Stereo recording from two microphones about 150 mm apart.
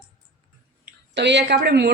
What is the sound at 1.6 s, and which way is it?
Speech, 90° right.